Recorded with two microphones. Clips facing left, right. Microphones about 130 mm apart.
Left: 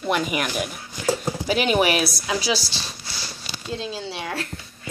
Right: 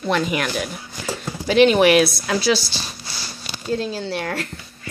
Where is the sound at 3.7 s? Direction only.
Centre (ahead or behind).